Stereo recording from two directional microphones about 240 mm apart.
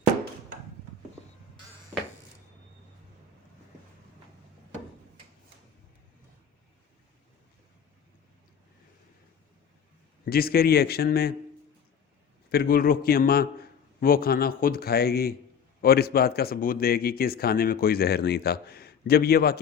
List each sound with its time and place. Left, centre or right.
10.2 s speech: left
12.5 s speech: left